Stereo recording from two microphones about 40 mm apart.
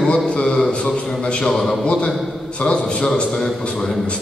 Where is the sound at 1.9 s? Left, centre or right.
Left.